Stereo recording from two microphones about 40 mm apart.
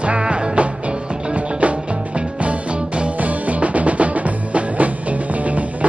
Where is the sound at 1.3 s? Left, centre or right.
Right.